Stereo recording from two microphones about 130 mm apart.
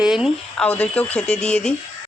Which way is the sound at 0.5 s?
10° left (ahead or behind).